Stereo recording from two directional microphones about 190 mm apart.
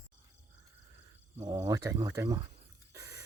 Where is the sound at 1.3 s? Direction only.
20° right (ahead or behind).